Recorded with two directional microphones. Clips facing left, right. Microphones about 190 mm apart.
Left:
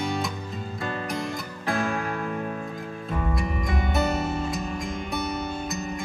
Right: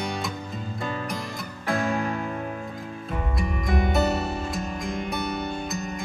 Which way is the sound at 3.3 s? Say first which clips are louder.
Right 1 dB; centre (ahead or behind).